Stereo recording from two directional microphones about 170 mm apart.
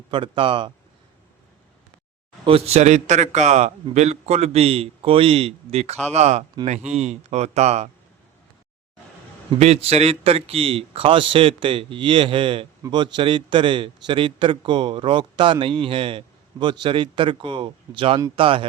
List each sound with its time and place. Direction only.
0.1 s a man's voice: 30° right (ahead or behind)
2.4 s a man's voice: 35° right (ahead or behind)
9.5 s a man's voice: 35° right (ahead or behind)